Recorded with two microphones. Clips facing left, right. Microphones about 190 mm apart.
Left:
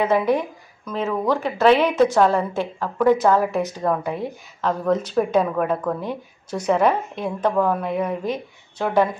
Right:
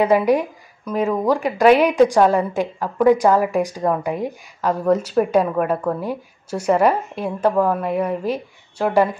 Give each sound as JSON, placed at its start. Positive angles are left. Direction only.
{"t": 0.0, "sound": "speech", "side_deg": -10}